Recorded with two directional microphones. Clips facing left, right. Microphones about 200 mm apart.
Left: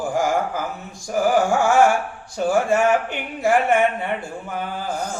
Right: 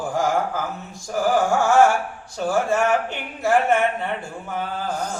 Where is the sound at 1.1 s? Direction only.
15° left (ahead or behind).